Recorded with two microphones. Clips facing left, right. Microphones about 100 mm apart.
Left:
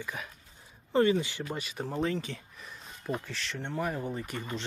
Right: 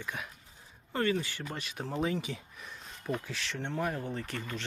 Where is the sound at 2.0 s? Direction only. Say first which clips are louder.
Left 1 dB; 10° right (ahead or behind); by 4.4 s 10° left (ahead or behind).